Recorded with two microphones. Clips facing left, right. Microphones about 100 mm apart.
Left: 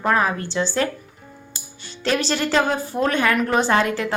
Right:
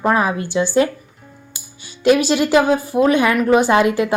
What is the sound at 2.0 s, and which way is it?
Speech, 10° right (ahead or behind).